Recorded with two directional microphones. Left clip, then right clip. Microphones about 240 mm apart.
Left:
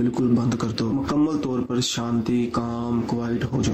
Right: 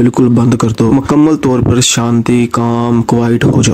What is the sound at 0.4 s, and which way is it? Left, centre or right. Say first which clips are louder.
Speech: right 14 dB; right.